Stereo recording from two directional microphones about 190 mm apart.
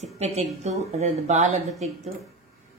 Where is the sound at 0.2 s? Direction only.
35° right (ahead or behind).